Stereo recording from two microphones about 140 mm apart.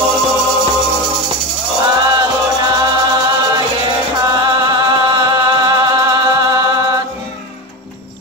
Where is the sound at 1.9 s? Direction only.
30° right (ahead or behind).